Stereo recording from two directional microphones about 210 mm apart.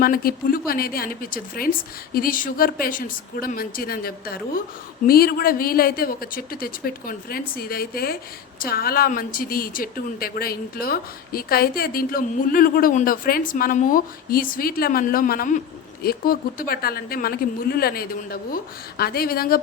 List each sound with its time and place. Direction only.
0.0 s speech: 45° left (ahead or behind)